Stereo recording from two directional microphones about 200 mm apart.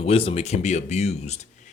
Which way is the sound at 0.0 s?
30° left (ahead or behind).